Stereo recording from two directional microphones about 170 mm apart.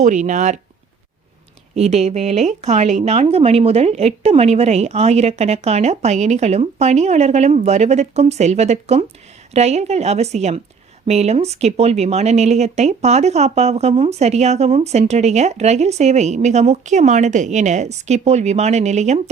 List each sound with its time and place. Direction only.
0.0 s speech: 45° right (ahead or behind)
1.7 s speech: 40° right (ahead or behind)